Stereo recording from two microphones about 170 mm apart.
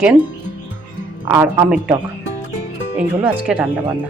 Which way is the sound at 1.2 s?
15° right (ahead or behind).